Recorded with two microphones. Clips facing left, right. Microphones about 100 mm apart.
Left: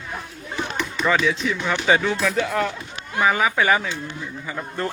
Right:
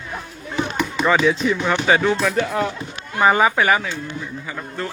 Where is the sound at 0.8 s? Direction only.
15° right (ahead or behind).